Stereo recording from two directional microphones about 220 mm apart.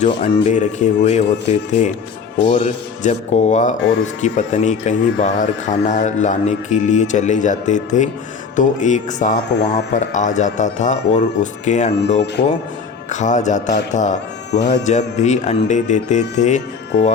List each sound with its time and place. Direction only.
0.2 s speech: 30° left (ahead or behind)
9.5 s speech: 50° left (ahead or behind)
9.9 s speech: 35° left (ahead or behind)